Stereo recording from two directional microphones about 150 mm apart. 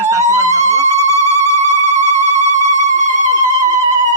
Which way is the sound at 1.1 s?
50° right (ahead or behind).